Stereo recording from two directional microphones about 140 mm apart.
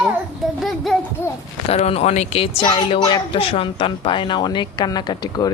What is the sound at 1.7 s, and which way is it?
Speech, 45° left (ahead or behind).